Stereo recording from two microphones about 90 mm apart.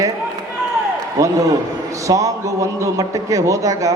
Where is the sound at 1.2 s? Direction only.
40° right (ahead or behind).